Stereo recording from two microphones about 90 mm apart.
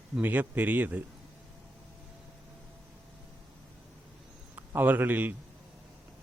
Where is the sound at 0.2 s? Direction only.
20° right (ahead or behind).